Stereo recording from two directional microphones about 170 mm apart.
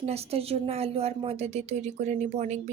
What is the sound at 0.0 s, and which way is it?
Speech, 35° right (ahead or behind).